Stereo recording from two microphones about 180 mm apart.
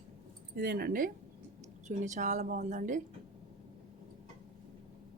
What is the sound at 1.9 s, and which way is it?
Speech, 40° right (ahead or behind).